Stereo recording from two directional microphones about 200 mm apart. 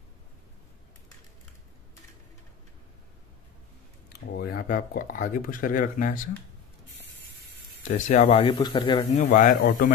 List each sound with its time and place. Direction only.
4.1 s speech: 50° left (ahead or behind)
7.8 s speech: 40° left (ahead or behind); by 9.0 s 20° left (ahead or behind)
9.1 s a man's voice: 35° left (ahead or behind)